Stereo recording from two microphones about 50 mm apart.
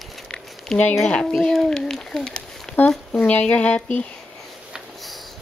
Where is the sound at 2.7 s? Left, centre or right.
Centre.